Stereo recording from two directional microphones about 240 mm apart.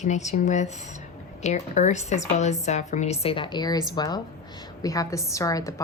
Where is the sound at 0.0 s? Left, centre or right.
Left.